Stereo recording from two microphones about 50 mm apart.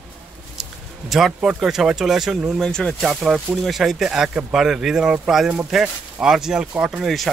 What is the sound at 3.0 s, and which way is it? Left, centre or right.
Speech, centre.